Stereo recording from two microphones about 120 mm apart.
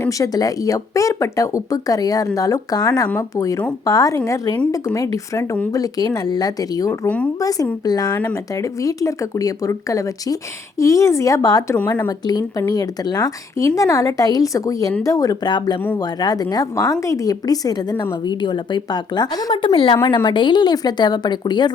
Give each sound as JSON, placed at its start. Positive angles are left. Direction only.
{"t": 0.1, "sound": "speech", "side_deg": 30}